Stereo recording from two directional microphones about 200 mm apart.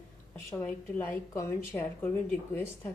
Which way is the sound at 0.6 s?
10° left (ahead or behind).